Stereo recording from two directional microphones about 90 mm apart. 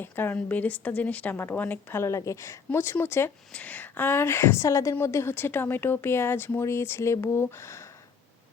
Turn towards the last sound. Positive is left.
turn(degrees=30)  # may be behind; listen again after turning